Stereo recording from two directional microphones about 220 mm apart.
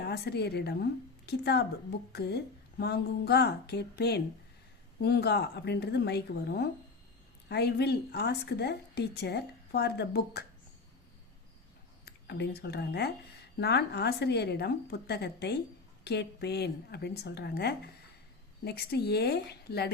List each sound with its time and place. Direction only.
0.0 s a woman's voice: 50° left (ahead or behind)
12.0 s a woman's voice: 50° left (ahead or behind)